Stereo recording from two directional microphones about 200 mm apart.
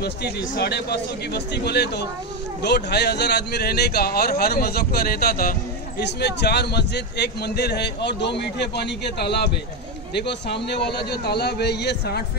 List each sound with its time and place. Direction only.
0.6 s speech: 55° left (ahead or behind)